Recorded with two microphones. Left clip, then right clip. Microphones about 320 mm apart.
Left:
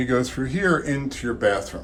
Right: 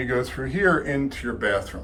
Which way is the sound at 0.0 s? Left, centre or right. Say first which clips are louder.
Left 2 dB; centre.